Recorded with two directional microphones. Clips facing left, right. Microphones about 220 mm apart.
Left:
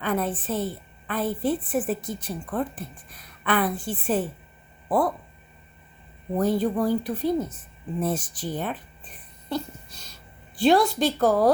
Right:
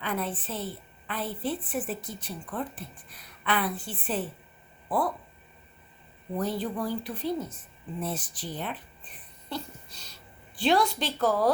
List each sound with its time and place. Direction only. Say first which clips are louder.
0.0 s a woman's voice: left 6 dB; 45° left (ahead or behind)
6.3 s a woman's voice: left 7 dB; 45° left (ahead or behind)